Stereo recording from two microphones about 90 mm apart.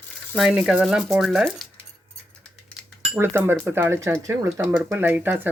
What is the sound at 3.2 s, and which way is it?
Speech, 25° right (ahead or behind).